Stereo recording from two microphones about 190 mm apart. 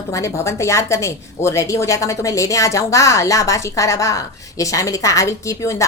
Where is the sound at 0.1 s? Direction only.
15° left (ahead or behind).